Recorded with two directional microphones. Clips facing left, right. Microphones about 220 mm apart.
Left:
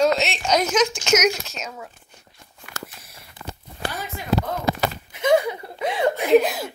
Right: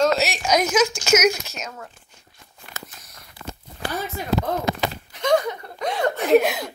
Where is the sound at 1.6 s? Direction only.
5° left (ahead or behind).